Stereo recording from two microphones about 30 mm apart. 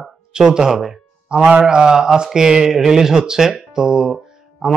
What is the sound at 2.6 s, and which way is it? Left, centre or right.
Speech, centre.